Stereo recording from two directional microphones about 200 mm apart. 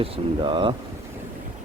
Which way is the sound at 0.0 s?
25° right (ahead or behind).